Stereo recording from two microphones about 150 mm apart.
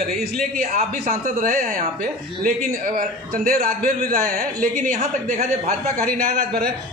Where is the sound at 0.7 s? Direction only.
60° right (ahead or behind).